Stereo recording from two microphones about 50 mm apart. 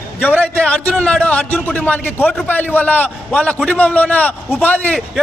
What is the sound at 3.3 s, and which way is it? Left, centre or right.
A man's voice, centre.